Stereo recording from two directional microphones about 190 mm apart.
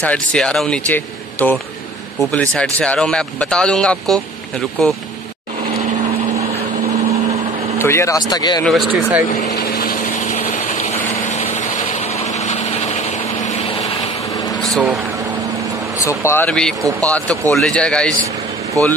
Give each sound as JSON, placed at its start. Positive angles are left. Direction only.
{"t": 0.0, "sound": "a man's voice", "side_deg": 5}
{"t": 7.8, "sound": "speech", "side_deg": 15}
{"t": 8.6, "sound": "speech", "side_deg": 0}
{"t": 9.5, "sound": "vehicle", "side_deg": 55}
{"t": 14.6, "sound": "vehicle", "side_deg": 0}
{"t": 16.0, "sound": "a man's voice", "side_deg": 15}
{"t": 18.8, "sound": "speech", "side_deg": -15}